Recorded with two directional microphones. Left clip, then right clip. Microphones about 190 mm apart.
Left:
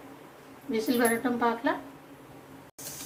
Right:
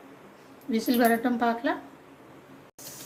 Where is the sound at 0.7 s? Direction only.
55° right (ahead or behind).